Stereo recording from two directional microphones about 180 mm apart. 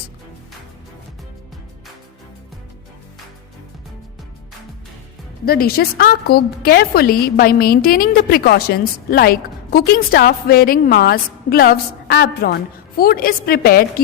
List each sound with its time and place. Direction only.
5.5 s a woman's voice: 60° left (ahead or behind)